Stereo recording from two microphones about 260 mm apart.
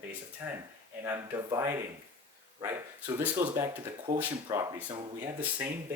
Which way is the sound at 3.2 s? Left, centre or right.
Centre.